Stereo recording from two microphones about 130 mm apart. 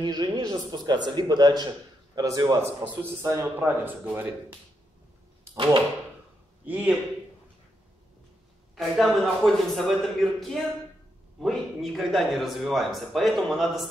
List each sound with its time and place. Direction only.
0.0 s a man's voice: 30° right (ahead or behind)
2.8 s speech: 15° right (ahead or behind)
6.6 s speech: 15° right (ahead or behind)
8.7 s speech: centre (ahead or behind)